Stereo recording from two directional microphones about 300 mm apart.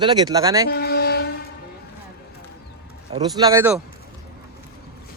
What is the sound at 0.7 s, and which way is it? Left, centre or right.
Music, left.